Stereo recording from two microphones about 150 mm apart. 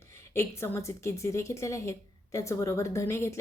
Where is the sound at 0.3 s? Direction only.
20° left (ahead or behind).